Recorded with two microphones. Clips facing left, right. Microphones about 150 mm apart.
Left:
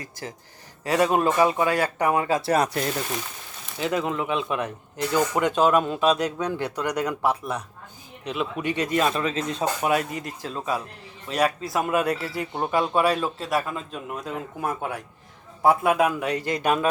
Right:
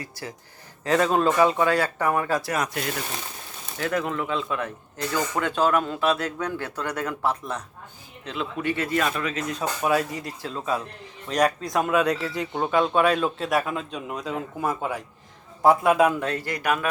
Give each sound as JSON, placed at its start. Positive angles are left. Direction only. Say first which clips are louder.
{"t": 0.9, "sound": "speech", "louder": "even", "side_deg": 10}
{"t": 2.5, "sound": "speech", "louder": "left 5 dB", "side_deg": 35}
{"t": 3.8, "sound": "speech", "louder": "left 1 dB", "side_deg": 20}
{"t": 11.3, "sound": "speech", "louder": "right 1 dB", "side_deg": 5}
{"t": 16.3, "sound": "speech", "louder": "left 2 dB", "side_deg": 20}